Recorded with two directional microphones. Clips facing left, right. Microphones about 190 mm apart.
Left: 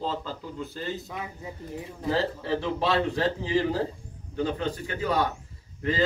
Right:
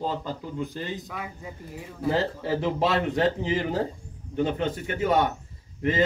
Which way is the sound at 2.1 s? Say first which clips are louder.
Even; 25° right (ahead or behind).